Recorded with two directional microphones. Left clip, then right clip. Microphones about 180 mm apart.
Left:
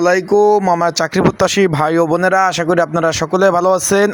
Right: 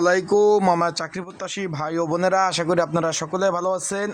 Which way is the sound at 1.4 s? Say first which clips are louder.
Left 11 dB; 45° left (ahead or behind).